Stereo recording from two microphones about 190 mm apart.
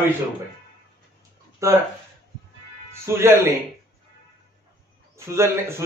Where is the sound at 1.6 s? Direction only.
15° right (ahead or behind).